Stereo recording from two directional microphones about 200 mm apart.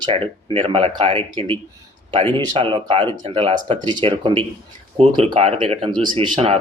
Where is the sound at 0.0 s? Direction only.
25° right (ahead or behind).